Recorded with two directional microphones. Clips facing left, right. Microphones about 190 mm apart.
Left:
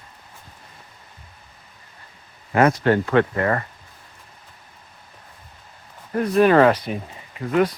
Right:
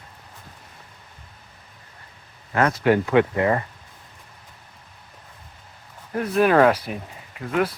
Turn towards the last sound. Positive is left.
turn(degrees=-5)  # may be behind; listen again after turning